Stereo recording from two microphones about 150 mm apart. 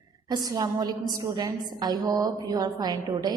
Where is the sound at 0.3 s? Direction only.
25° right (ahead or behind).